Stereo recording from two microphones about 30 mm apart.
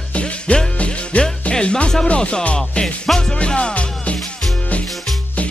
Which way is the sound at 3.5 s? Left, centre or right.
Left.